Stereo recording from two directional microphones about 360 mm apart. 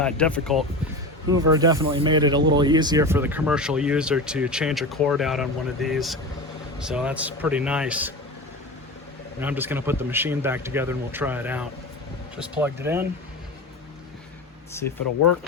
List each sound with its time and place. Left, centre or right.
0.0 s speech: centre
1.3 s speech: centre
9.4 s speech: centre
15.0 s speech: left